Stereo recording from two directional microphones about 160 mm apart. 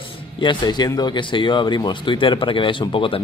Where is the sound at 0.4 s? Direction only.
30° left (ahead or behind).